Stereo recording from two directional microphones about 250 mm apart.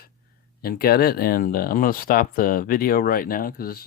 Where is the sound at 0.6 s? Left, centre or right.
Left.